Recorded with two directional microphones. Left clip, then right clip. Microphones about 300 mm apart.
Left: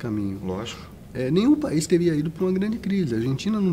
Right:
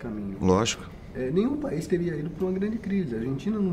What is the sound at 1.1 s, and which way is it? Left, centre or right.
Speech, left.